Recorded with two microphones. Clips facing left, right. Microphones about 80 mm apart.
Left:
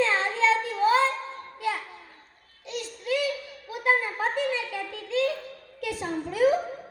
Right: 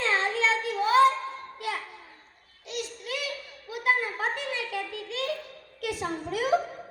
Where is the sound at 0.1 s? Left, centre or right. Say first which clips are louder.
Left 2 dB; left.